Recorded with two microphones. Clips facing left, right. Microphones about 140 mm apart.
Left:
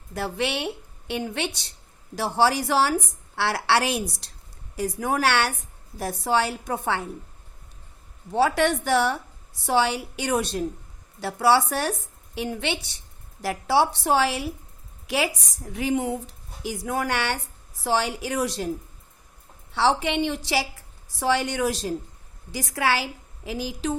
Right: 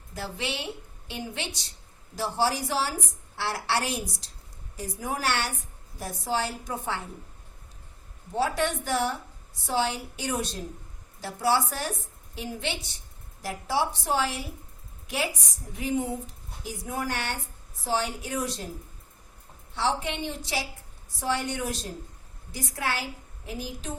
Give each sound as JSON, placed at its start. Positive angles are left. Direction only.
{"t": 0.1, "sound": "a woman's voice", "side_deg": 65}
{"t": 8.4, "sound": "a woman's voice", "side_deg": 75}
{"t": 19.7, "sound": "a woman's voice", "side_deg": 80}